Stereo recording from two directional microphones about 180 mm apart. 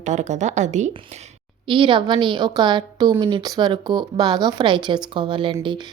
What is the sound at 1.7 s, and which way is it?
A woman's voice, 25° right (ahead or behind).